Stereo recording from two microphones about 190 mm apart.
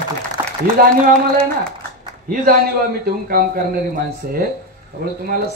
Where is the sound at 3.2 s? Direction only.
50° right (ahead or behind).